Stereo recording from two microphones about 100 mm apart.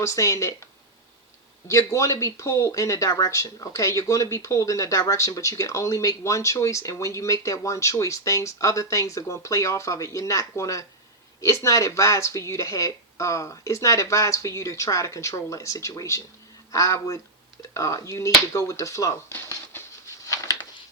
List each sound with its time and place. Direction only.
0.0 s speech: 30° left (ahead or behind)
1.6 s speech: 30° left (ahead or behind)
19.3 s a sound: 25° left (ahead or behind)